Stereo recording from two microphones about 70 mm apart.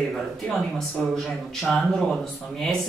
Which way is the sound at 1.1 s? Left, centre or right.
Centre.